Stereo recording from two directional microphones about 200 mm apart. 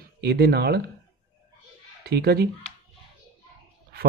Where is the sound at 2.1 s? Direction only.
55° right (ahead or behind).